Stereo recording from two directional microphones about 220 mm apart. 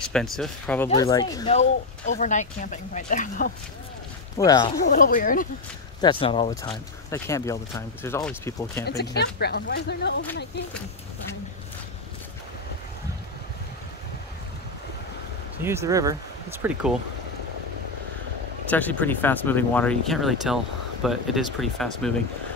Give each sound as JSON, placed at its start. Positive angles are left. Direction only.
{"t": 0.1, "sound": "speech", "side_deg": 5}
{"t": 0.9, "sound": "speech", "side_deg": 15}
{"t": 1.5, "sound": "speech", "side_deg": 30}
{"t": 4.4, "sound": "speech", "side_deg": 15}
{"t": 4.8, "sound": "speech", "side_deg": 40}
{"t": 5.9, "sound": "speech", "side_deg": 20}
{"t": 7.1, "sound": "speech", "side_deg": 15}
{"t": 8.8, "sound": "speech", "side_deg": 50}
{"t": 15.6, "sound": "speech", "side_deg": -10}
{"t": 18.7, "sound": "speech", "side_deg": 5}